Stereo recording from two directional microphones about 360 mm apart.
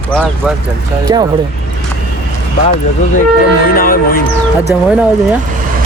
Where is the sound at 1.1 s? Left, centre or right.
Centre.